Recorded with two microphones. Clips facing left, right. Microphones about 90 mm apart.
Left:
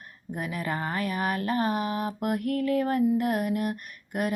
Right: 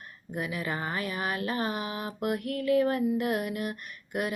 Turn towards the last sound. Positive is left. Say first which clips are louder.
# left 2 dB
turn(degrees=45)  # may be behind; listen again after turning